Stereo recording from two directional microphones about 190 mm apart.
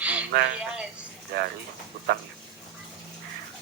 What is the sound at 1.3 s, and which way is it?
Speech, 55° right (ahead or behind).